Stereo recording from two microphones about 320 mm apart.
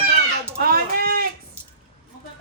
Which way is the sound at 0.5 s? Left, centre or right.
Right.